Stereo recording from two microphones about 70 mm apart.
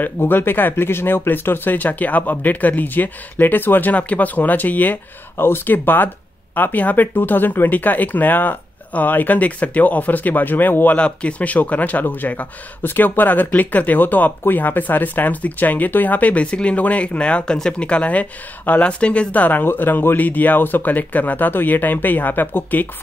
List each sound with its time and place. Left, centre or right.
0.0 s speech: left